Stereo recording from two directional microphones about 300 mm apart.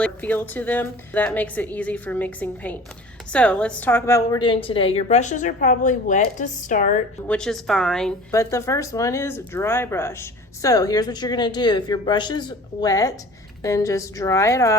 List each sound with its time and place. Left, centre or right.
0.0 s a woman's voice: centre; by 7.0 s left
7.3 s speech: centre